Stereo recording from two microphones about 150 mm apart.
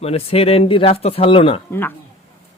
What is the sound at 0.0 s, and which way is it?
Speech, 40° left (ahead or behind).